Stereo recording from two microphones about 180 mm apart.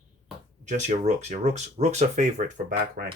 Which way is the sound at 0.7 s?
40° right (ahead or behind).